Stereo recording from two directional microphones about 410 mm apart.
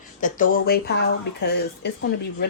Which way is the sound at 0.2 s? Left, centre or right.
Centre.